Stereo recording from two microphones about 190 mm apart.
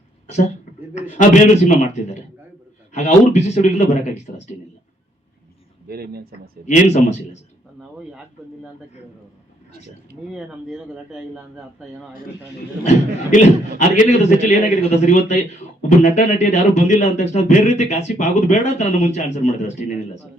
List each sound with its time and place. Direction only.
1.2 s speech: 40° left (ahead or behind)
5.9 s speech: 55° right (ahead or behind)
6.7 s speech: 35° left (ahead or behind)
10.3 s speech: 5° right (ahead or behind)
13.3 s speech: 40° left (ahead or behind)